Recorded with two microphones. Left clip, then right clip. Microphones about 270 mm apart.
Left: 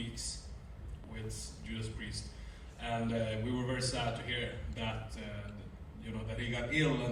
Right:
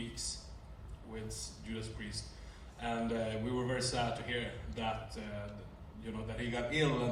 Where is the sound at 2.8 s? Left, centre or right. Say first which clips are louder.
Even; right.